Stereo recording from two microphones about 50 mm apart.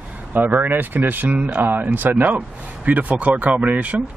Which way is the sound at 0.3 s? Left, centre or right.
Right.